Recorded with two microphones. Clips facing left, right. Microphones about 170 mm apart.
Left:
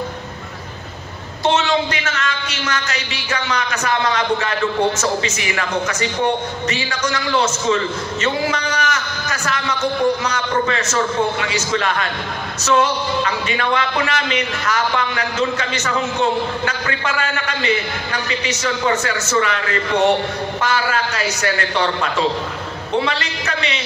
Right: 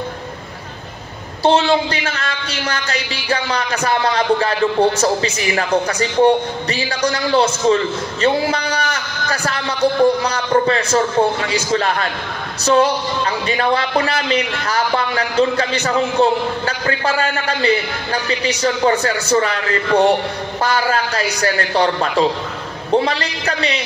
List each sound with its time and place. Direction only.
1.4 s a man's voice: 30° right (ahead or behind)